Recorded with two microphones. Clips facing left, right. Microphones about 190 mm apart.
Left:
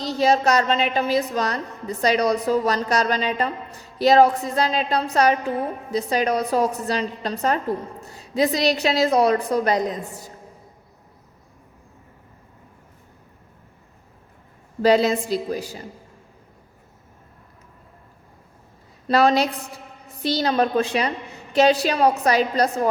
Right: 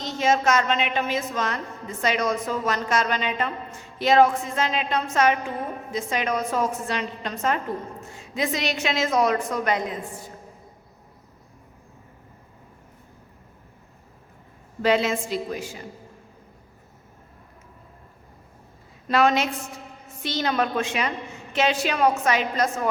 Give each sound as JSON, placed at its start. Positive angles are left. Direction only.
{"t": 0.0, "sound": "a woman's voice", "side_deg": 35}
{"t": 14.8, "sound": "a woman's voice", "side_deg": 35}
{"t": 19.0, "sound": "a woman's voice", "side_deg": 35}